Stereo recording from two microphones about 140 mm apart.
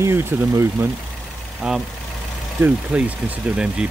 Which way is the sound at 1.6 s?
5° right (ahead or behind).